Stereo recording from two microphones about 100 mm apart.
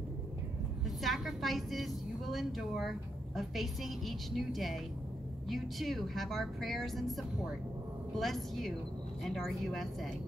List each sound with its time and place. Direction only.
0.8 s a woman's voice: centre (ahead or behind)